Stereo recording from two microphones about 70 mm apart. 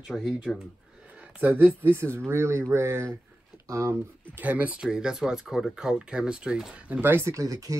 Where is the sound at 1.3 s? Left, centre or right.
Right.